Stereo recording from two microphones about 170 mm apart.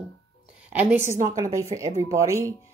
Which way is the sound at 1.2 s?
20° right (ahead or behind).